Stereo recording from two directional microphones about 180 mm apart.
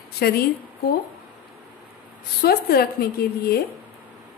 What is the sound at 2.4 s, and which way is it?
Speech, 60° left (ahead or behind).